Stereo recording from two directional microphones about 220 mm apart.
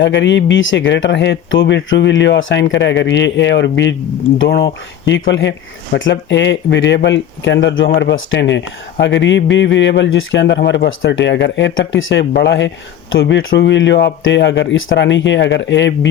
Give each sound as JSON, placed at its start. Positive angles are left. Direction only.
{"t": 0.0, "sound": "speech", "side_deg": 55}
{"t": 12.3, "sound": "speech", "side_deg": 50}